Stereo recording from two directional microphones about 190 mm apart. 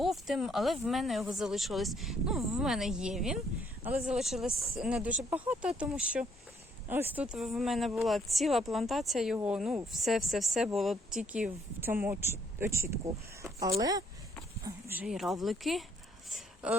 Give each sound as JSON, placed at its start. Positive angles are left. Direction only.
{"t": 0.0, "sound": "a woman's voice", "side_deg": 0}